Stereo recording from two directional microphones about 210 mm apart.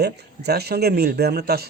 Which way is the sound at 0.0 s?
50° right (ahead or behind).